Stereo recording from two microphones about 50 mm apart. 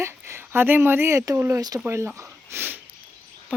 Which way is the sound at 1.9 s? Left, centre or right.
Right.